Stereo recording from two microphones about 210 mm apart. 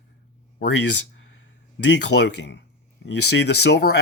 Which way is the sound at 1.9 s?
55° left (ahead or behind).